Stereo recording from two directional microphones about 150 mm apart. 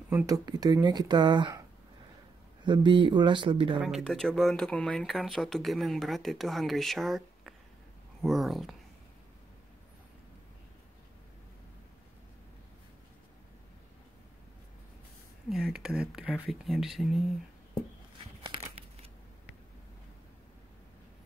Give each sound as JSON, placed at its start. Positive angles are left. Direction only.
{"t": 0.3, "sound": "speech", "side_deg": -25}
{"t": 2.6, "sound": "speech", "side_deg": -30}
{"t": 3.8, "sound": "speech", "side_deg": 0}
{"t": 15.5, "sound": "speech", "side_deg": -5}
{"t": 18.4, "sound": "crumpling", "side_deg": -35}